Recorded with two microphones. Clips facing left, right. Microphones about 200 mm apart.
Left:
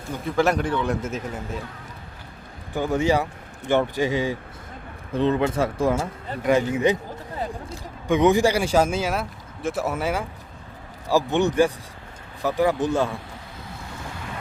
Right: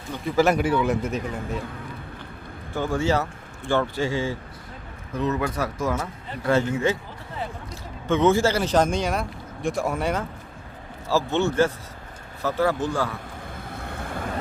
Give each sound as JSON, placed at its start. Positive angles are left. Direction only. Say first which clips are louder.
{"t": 0.1, "sound": "a man's voice", "louder": "right 1 dB", "side_deg": 0}
{"t": 2.7, "sound": "speech", "louder": "left 2 dB", "side_deg": 15}
{"t": 5.1, "sound": "speech", "louder": "left 4 dB", "side_deg": 30}
{"t": 6.5, "sound": "speech", "louder": "left 2 dB", "side_deg": 15}
{"t": 8.0, "sound": "speech", "louder": "left 1 dB", "side_deg": 15}
{"t": 11.1, "sound": "speech", "louder": "left 2 dB", "side_deg": 15}
{"t": 13.8, "sound": "vehicle", "louder": "right 5 dB", "side_deg": -55}